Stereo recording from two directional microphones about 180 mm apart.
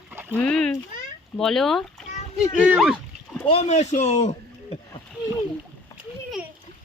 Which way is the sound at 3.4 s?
35° left (ahead or behind).